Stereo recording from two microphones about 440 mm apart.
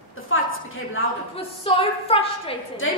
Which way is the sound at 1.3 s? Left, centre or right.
Centre.